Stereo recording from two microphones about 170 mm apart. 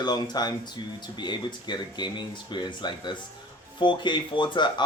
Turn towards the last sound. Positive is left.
turn(degrees=25)  # may be behind; listen again after turning